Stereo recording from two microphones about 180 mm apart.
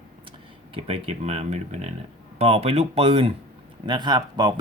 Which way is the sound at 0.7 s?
35° right (ahead or behind).